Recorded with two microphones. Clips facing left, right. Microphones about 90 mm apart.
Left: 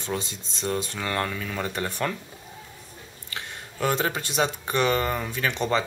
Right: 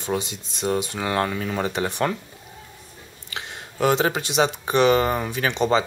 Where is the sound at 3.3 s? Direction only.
20° right (ahead or behind).